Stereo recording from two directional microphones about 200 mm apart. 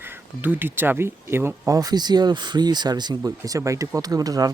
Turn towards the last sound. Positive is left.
turn(degrees=-20)  # may be behind; listen again after turning